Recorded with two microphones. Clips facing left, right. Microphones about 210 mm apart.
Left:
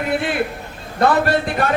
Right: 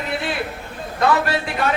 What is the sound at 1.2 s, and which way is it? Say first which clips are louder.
Speech: left 4 dB; 55° left (ahead or behind).